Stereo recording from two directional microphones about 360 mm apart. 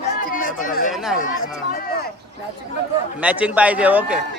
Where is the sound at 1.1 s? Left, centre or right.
Left.